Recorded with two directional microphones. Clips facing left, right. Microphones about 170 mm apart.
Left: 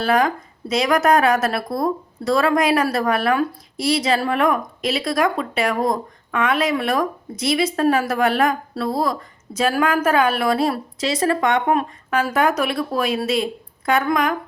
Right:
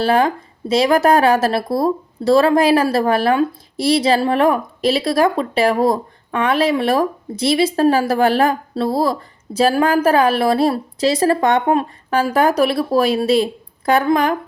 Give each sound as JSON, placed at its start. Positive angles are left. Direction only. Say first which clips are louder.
{"t": 0.0, "sound": "speech", "louder": "right 3 dB", "side_deg": -30}